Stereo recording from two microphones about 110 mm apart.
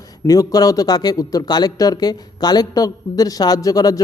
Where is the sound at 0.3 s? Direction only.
35° left (ahead or behind).